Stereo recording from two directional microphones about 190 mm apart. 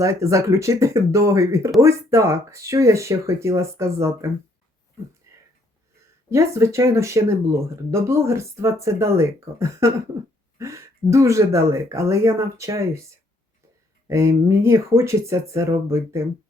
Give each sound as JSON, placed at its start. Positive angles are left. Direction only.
{"t": 0.0, "sound": "speech", "side_deg": -15}
{"t": 6.3, "sound": "speech", "side_deg": -15}
{"t": 14.1, "sound": "speech", "side_deg": -15}